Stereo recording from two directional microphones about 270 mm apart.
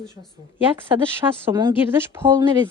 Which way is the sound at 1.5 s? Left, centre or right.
Centre.